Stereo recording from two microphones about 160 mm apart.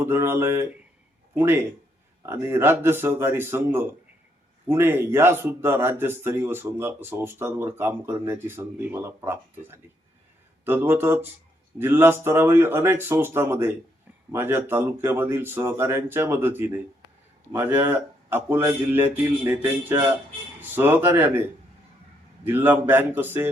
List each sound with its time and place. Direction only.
0.0 s speech: 15° right (ahead or behind)
22.4 s speech: 10° right (ahead or behind)